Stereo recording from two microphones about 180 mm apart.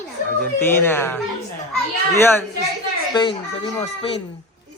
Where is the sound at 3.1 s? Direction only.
25° left (ahead or behind).